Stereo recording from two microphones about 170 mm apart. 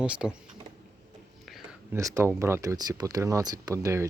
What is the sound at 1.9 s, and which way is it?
Speech, 15° right (ahead or behind).